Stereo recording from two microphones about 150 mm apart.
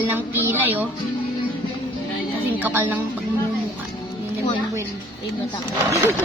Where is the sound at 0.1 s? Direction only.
15° right (ahead or behind).